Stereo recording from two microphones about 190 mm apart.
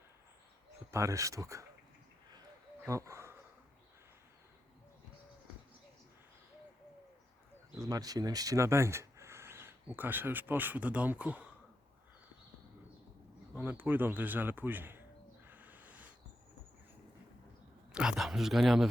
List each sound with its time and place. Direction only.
0.9 s a man's voice: 15° right (ahead or behind)
2.8 s bird: 15° right (ahead or behind)
7.8 s speech: 20° right (ahead or behind)
13.6 s a man's voice: 10° right (ahead or behind)
15.4 s a sound: 10° right (ahead or behind)
17.9 s speech: 5° right (ahead or behind)